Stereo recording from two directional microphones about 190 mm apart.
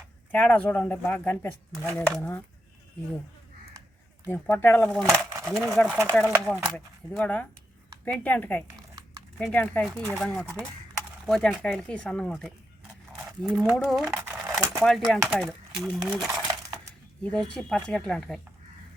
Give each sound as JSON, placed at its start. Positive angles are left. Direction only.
{"t": 0.3, "sound": "speech", "side_deg": 5}
{"t": 4.3, "sound": "speech", "side_deg": 10}
{"t": 7.2, "sound": "speech", "side_deg": 10}
{"t": 14.0, "sound": "a sound", "side_deg": -15}
{"t": 14.8, "sound": "speech", "side_deg": 0}
{"t": 17.2, "sound": "speech", "side_deg": 5}